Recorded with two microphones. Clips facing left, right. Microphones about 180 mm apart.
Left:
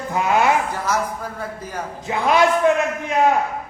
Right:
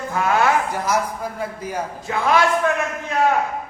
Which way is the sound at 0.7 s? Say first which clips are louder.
Right 1 dB; 10° right (ahead or behind).